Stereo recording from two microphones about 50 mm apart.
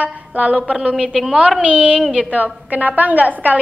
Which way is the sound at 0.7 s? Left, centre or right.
Centre.